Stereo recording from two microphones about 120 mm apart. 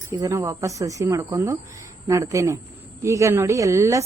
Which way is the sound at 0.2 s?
25° right (ahead or behind).